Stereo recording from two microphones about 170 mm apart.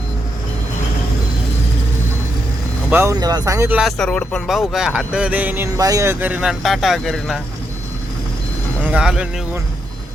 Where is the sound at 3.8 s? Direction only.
Centre (ahead or behind).